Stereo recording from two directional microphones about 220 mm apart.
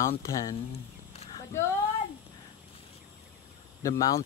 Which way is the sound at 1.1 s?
25° left (ahead or behind).